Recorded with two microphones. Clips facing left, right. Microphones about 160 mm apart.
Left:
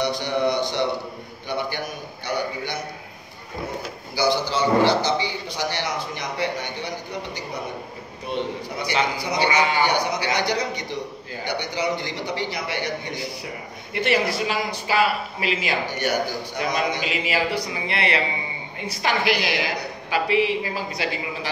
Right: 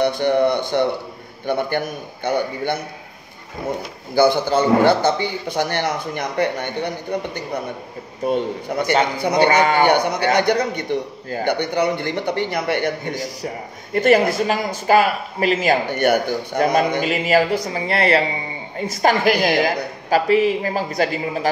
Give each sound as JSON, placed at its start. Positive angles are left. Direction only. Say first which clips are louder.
{"t": 0.0, "sound": "speech", "louder": "right 6 dB", "side_deg": -55}
{"t": 4.1, "sound": "a man's voice", "louder": "right 7 dB", "side_deg": -50}